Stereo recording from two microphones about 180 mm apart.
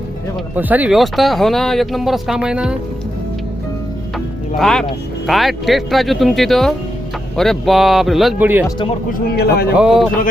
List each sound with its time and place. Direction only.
0.5 s speech: 10° right (ahead or behind)
4.5 s speech: centre (ahead or behind)
9.3 s a man's voice: 65° left (ahead or behind)
9.7 s speech: 5° right (ahead or behind)